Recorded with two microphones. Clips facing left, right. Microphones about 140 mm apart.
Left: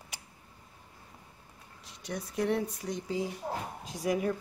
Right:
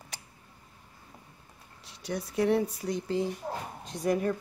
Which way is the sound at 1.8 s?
Centre (ahead or behind).